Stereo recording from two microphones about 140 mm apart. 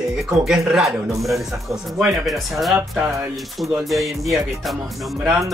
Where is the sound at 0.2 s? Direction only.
5° right (ahead or behind).